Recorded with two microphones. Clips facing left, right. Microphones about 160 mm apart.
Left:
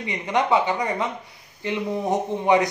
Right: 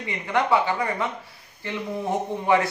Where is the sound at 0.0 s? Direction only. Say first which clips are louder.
Left 1 dB; 20° left (ahead or behind).